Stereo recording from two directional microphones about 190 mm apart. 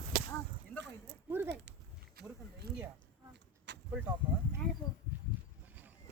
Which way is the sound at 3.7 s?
65° right (ahead or behind).